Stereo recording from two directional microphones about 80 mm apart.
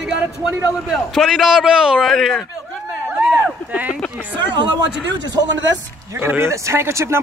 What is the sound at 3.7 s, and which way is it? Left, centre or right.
Speech, centre.